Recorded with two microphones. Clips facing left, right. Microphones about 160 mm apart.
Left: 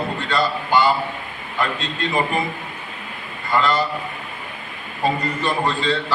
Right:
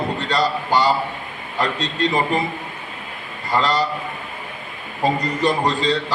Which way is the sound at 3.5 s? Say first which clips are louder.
Even; 35° right (ahead or behind).